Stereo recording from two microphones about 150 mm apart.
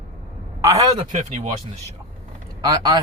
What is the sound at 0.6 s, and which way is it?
Speech, 20° right (ahead or behind).